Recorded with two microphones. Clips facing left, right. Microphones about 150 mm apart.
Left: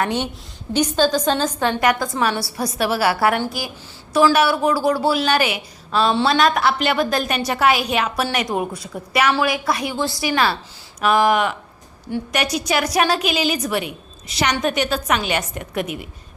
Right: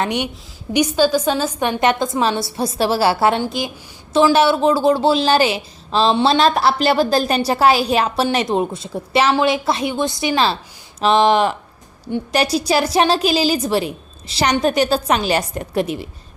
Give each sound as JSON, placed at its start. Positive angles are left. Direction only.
{"t": 0.0, "sound": "a woman's voice", "side_deg": -15}
{"t": 1.8, "sound": "a woman's voice", "side_deg": -25}